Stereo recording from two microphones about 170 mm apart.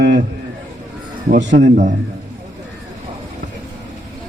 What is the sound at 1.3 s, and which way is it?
Speech, 50° right (ahead or behind).